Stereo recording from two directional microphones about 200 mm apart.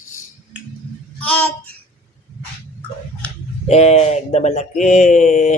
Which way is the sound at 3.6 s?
30° left (ahead or behind).